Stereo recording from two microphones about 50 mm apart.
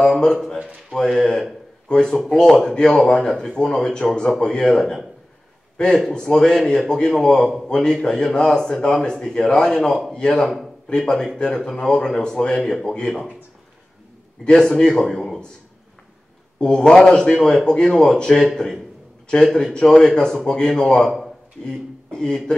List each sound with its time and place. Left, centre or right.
0.1 s a man's voice: centre
6.0 s a man's voice: centre
14.4 s a man's voice: centre
16.5 s a man's voice: centre